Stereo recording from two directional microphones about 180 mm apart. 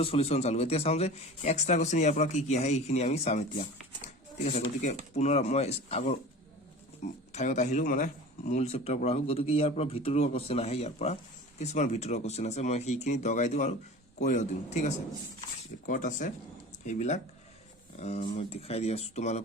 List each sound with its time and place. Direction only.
0.0 s a man's voice: 35° left (ahead or behind)